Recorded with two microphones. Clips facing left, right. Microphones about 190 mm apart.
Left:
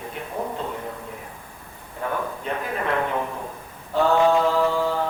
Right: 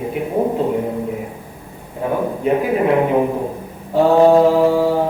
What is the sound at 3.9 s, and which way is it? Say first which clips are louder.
Mantra: right 8 dB; 35° right (ahead or behind).